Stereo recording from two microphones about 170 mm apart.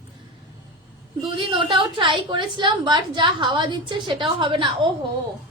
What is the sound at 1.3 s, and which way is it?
A woman's voice, 30° right (ahead or behind).